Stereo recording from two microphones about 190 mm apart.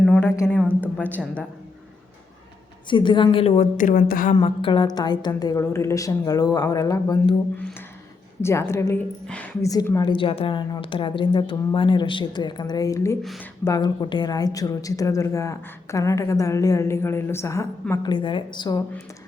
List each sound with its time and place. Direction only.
0.0 s a woman's voice: 5° left (ahead or behind)
2.9 s a woman's voice: 25° left (ahead or behind); by 4.4 s 45° left (ahead or behind)
4.4 s a woman's voice: 25° left (ahead or behind)